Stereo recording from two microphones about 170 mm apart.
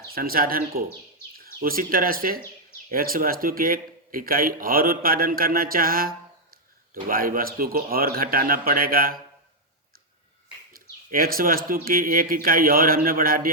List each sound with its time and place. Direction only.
0.1 s speech: 60° right (ahead or behind)
10.7 s speech: 60° right (ahead or behind)